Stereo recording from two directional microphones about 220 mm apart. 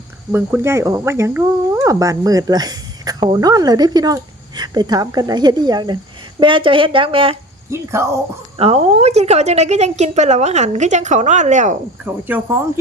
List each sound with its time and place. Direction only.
0.3 s a woman's voice: 10° right (ahead or behind)
7.7 s speech: 10° right (ahead or behind)
8.5 s a woman's voice: 25° right (ahead or behind)
12.0 s speech: 10° right (ahead or behind)